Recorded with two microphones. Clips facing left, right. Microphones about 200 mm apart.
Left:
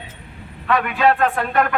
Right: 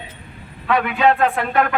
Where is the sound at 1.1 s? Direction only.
10° right (ahead or behind).